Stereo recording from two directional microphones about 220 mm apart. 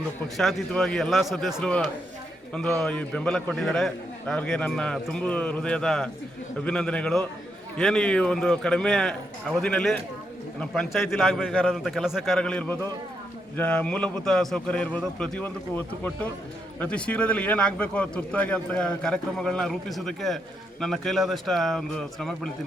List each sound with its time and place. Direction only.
0.3 s a man's voice: centre (ahead or behind)